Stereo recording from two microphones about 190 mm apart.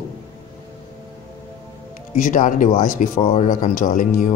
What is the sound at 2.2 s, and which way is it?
Speech, 45° left (ahead or behind).